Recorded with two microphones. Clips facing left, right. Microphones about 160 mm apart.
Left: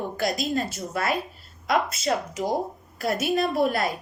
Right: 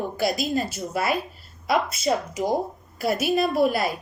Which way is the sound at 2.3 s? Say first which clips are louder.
Right 2 dB; 20° right (ahead or behind).